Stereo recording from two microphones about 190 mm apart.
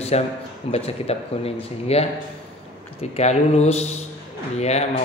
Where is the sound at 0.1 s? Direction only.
35° left (ahead or behind).